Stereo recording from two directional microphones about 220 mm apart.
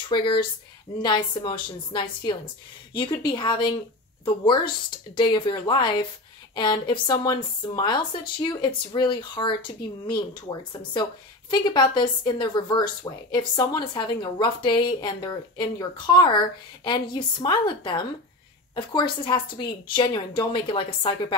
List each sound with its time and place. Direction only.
0.1 s speech: 20° left (ahead or behind)
5.1 s speech: 20° left (ahead or behind)